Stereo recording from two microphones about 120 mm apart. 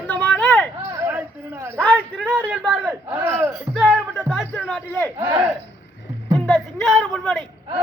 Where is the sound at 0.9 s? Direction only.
20° right (ahead or behind).